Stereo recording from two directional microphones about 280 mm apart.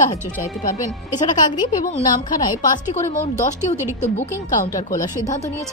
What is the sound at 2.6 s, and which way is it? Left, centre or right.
Speech, left.